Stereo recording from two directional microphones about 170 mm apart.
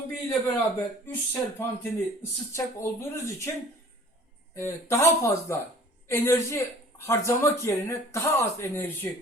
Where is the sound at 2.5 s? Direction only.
15° left (ahead or behind).